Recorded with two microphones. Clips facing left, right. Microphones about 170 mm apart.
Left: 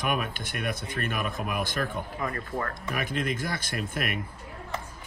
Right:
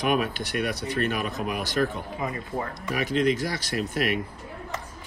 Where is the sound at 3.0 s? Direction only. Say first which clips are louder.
Right 7 dB; 50° left (ahead or behind).